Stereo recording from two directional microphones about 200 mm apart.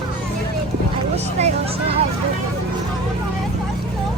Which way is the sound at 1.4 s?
35° right (ahead or behind).